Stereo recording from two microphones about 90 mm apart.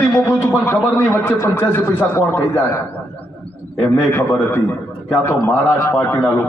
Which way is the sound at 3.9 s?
25° left (ahead or behind).